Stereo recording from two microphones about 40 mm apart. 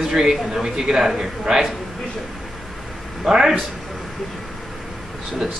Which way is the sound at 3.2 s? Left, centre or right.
Centre.